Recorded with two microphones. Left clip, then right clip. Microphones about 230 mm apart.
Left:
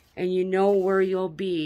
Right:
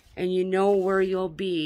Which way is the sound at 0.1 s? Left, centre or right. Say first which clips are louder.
Even; centre.